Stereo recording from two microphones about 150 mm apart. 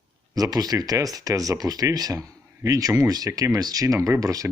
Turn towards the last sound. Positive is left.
turn(degrees=-20)  # may be behind; listen again after turning